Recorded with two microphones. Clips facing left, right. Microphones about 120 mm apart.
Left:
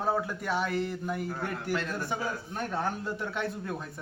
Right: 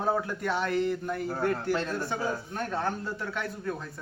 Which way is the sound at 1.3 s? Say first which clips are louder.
Right 6 dB; 35° right (ahead or behind).